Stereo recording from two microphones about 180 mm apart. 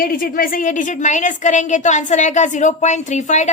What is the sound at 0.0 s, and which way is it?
A woman's voice, 55° left (ahead or behind).